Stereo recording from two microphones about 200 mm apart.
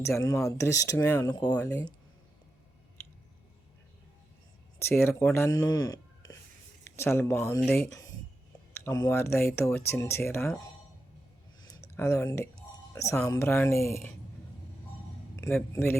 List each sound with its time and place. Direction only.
0.0 s speech: 15° left (ahead or behind)
1.5 s speech: 10° left (ahead or behind)
4.8 s speech: 10° left (ahead or behind)
5.5 s a sound: 20° left (ahead or behind)
6.9 s speech: 10° left (ahead or behind)
8.7 s speech: 15° left (ahead or behind)
11.7 s a sound: 15° left (ahead or behind)
12.9 s speech: 15° left (ahead or behind)
15.4 s speech: 15° left (ahead or behind)